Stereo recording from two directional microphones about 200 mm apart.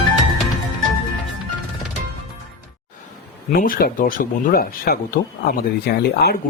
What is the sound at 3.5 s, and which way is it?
Speech, 45° left (ahead or behind).